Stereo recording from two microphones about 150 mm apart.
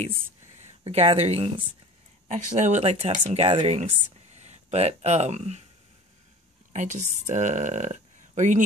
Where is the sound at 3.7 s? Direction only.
50° right (ahead or behind).